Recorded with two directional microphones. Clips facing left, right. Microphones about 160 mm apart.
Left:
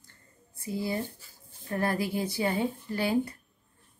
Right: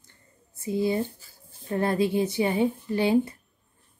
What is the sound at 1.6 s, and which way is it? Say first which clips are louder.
A woman's voice: right 5 dB; 25° right (ahead or behind).